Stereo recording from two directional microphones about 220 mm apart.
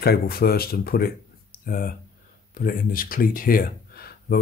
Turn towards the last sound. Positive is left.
turn(degrees=45)  # may be behind; listen again after turning